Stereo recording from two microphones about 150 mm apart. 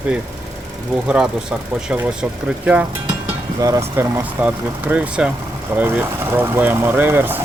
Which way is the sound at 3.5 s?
25° right (ahead or behind).